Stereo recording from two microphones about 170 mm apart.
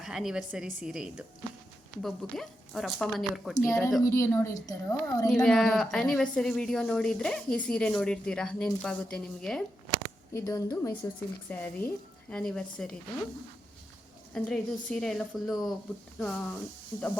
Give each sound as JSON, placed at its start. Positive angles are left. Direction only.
{"t": 0.0, "sound": "speech", "side_deg": -5}
{"t": 3.6, "sound": "a woman's voice", "side_deg": 20}
{"t": 5.3, "sound": "speech", "side_deg": 5}
{"t": 10.3, "sound": "speech", "side_deg": 15}
{"t": 14.3, "sound": "speech", "side_deg": 5}